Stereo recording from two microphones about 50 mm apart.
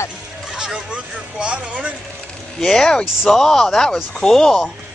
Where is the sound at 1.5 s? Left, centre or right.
Right.